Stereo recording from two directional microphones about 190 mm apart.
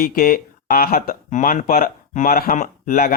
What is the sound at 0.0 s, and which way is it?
Speech, 50° left (ahead or behind).